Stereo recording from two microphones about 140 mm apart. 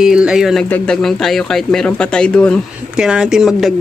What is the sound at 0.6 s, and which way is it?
Speech, 10° left (ahead or behind).